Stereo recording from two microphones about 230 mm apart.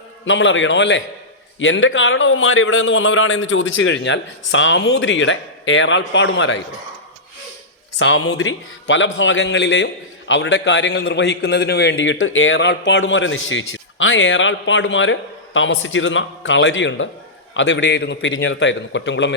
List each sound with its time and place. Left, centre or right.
0.3 s a man's voice: left
7.9 s a man's voice: left